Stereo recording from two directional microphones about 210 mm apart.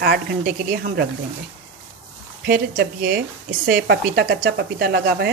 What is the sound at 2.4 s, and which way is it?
Speech, 50° right (ahead or behind).